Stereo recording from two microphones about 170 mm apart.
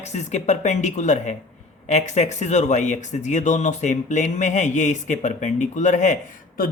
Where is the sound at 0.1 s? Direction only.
45° left (ahead or behind).